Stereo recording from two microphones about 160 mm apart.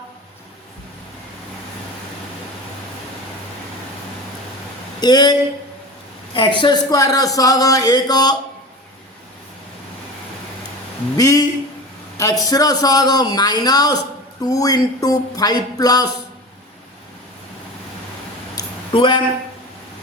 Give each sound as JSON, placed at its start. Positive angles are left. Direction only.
{"t": 4.9, "sound": "speech", "side_deg": 25}
{"t": 11.2, "sound": "speech", "side_deg": 20}
{"t": 18.9, "sound": "speech", "side_deg": 30}